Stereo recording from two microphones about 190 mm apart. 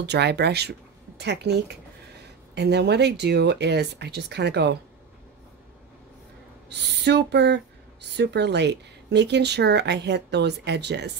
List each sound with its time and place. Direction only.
0.0 s speech: 65° right (ahead or behind)
6.7 s speech: 65° right (ahead or behind)